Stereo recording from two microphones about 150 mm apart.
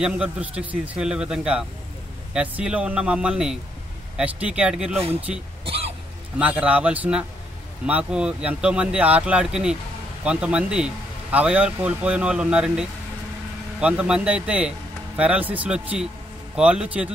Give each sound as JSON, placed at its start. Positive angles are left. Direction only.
{"t": 0.0, "sound": "a man's voice", "side_deg": -5}
{"t": 5.7, "sound": "cough", "side_deg": -40}
{"t": 6.3, "sound": "speech", "side_deg": -10}